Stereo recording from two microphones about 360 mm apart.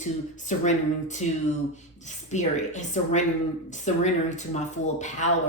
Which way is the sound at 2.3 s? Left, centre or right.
Centre.